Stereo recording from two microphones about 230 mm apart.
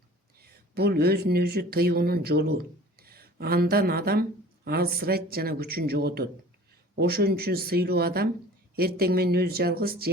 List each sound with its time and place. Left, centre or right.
0.4 s speech: right